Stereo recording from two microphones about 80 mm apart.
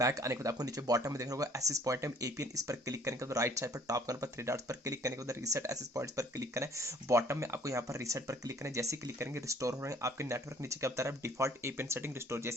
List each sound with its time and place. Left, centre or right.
0.0 s speech: right